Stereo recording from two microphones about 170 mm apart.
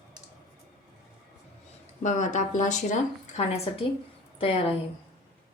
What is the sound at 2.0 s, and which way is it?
A woman's voice, 45° left (ahead or behind).